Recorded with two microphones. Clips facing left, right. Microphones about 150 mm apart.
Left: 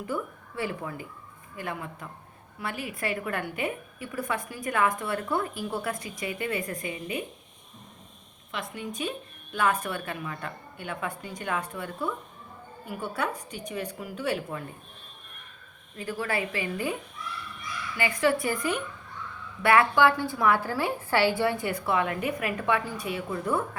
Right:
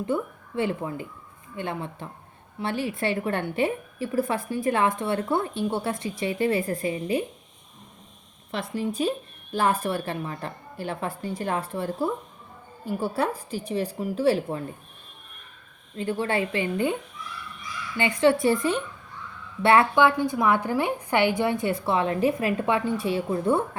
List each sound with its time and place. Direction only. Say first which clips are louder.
0.0 s a woman's voice: right 5 dB; 25° right (ahead or behind)
8.5 s speech: right 7 dB; 35° right (ahead or behind)
16.0 s a woman's voice: right 5 dB; 25° right (ahead or behind)